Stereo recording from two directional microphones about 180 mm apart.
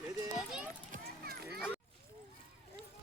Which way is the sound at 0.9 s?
60° right (ahead or behind).